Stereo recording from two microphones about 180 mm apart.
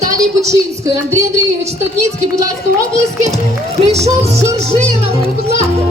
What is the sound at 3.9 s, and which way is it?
Speech, 35° right (ahead or behind).